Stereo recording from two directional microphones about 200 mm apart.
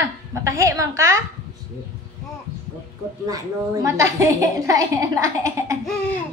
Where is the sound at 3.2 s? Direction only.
20° right (ahead or behind).